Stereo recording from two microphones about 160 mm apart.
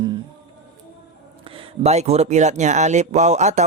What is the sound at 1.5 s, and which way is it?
Speech, 35° right (ahead or behind).